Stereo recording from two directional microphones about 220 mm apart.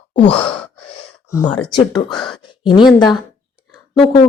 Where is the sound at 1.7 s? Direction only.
20° left (ahead or behind).